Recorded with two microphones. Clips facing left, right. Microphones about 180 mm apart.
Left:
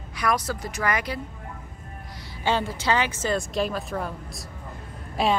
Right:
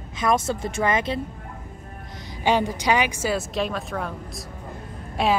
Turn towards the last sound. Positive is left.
turn(degrees=0)  # may be behind; listen again after turning